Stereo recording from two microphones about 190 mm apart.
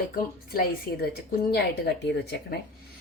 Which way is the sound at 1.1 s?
55° left (ahead or behind).